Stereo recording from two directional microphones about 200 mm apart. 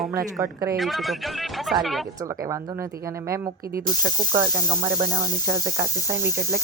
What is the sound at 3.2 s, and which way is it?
Speech, 15° right (ahead or behind).